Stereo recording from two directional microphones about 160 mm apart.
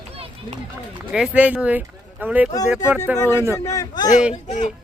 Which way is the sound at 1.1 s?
5° right (ahead or behind).